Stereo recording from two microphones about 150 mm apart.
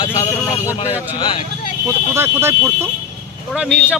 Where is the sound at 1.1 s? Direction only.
35° left (ahead or behind).